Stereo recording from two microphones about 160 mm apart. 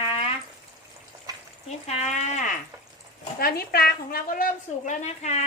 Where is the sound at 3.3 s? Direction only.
70° left (ahead or behind).